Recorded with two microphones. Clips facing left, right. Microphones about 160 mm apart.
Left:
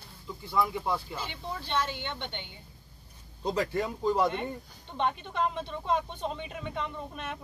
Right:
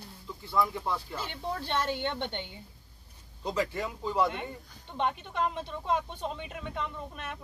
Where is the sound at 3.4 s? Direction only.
40° left (ahead or behind).